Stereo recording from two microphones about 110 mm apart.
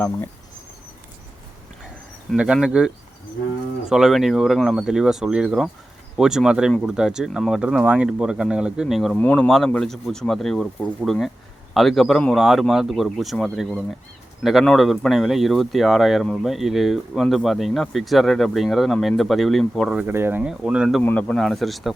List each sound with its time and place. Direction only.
2.3 s speech: 10° right (ahead or behind)
9.1 s speech: 15° left (ahead or behind)
20.1 s speech: 20° right (ahead or behind)
21.0 s speech: 15° left (ahead or behind)